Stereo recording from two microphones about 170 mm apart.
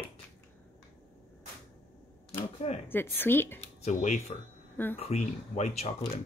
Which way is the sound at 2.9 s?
10° left (ahead or behind).